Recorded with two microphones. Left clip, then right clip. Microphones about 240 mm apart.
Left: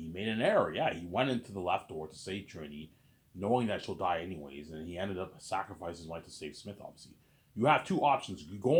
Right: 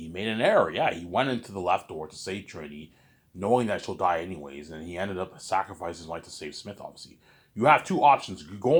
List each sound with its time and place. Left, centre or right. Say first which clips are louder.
0.1 s speech: right 7 dB; right